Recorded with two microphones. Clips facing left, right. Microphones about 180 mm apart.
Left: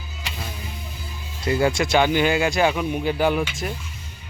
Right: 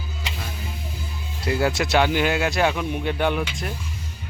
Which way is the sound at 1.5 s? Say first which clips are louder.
Left 2 dB; centre (ahead or behind).